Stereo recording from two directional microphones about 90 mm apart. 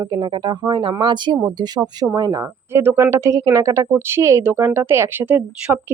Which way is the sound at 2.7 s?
30° right (ahead or behind).